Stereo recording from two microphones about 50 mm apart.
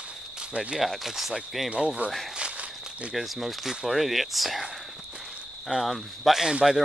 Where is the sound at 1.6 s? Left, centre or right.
Centre.